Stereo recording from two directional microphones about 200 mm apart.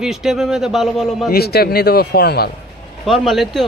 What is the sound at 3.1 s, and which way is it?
Speech, centre (ahead or behind).